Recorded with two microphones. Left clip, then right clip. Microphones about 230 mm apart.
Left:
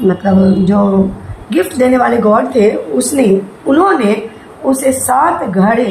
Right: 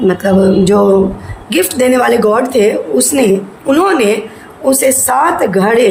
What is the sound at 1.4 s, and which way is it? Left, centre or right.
A man's voice, right.